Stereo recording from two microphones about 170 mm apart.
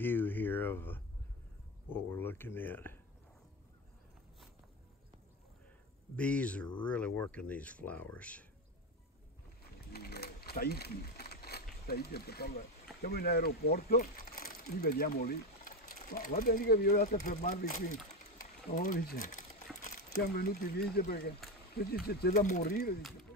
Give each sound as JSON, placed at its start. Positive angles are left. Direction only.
{"t": 0.0, "sound": "a sound", "side_deg": 10}
{"t": 2.0, "sound": "speech", "side_deg": 10}
{"t": 6.1, "sound": "speech", "side_deg": 5}
{"t": 9.9, "sound": "speech", "side_deg": 70}
{"t": 22.3, "sound": "speech", "side_deg": 45}
{"t": 22.7, "sound": "speech", "side_deg": 65}